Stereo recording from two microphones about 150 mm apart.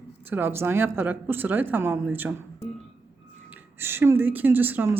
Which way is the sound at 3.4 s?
15° right (ahead or behind).